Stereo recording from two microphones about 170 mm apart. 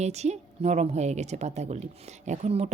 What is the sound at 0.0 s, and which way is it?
Speech, 40° right (ahead or behind).